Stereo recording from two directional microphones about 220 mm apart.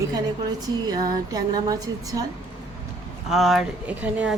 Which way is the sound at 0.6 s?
15° right (ahead or behind).